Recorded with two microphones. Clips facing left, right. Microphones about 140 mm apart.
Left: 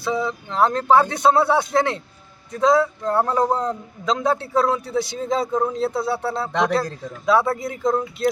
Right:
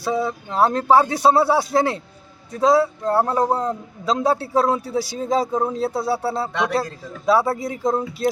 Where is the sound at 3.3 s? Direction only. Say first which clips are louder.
Even; 10° right (ahead or behind).